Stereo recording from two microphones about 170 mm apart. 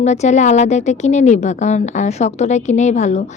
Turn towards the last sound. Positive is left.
turn(degrees=45)  # may be behind; listen again after turning